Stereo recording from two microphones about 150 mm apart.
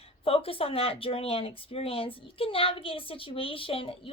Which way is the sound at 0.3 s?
40° left (ahead or behind).